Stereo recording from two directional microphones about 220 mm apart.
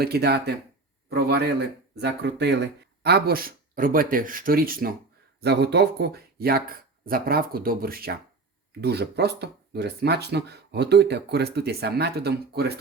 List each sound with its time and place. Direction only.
0.0 s speech: 45° right (ahead or behind)